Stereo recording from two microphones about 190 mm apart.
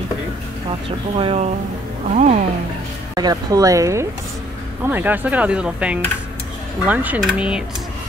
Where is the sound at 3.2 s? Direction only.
20° right (ahead or behind).